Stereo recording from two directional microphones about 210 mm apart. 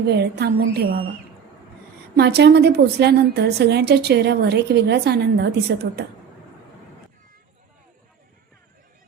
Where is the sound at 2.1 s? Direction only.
50° right (ahead or behind).